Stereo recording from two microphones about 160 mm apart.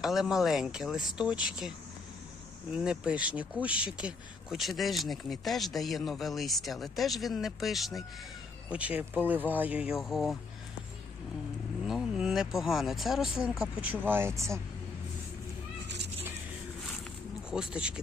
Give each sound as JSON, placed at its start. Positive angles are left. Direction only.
{"t": 0.0, "sound": "speech", "side_deg": 0}
{"t": 2.7, "sound": "speech", "side_deg": -5}
{"t": 11.9, "sound": "speech", "side_deg": -5}
{"t": 17.5, "sound": "speech", "side_deg": -5}